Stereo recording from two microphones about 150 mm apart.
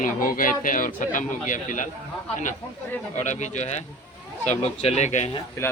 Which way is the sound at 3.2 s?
55° left (ahead or behind).